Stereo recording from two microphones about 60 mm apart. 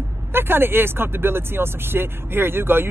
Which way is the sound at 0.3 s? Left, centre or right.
Right.